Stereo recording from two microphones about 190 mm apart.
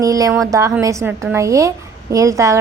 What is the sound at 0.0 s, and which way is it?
A woman's voice, 15° right (ahead or behind).